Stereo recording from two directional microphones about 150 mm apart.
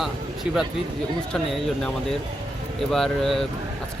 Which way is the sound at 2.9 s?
Centre (ahead or behind).